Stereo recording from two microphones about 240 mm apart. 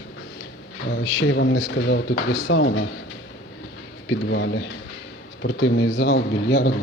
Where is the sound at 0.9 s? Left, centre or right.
Left.